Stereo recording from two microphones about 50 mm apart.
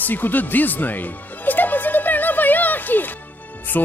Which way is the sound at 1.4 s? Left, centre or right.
Left.